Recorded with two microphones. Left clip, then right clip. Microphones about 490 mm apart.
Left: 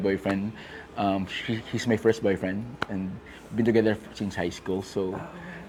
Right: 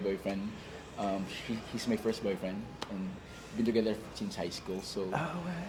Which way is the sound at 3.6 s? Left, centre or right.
Left.